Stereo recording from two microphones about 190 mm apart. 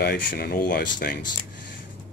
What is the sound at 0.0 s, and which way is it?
Speech, 55° left (ahead or behind).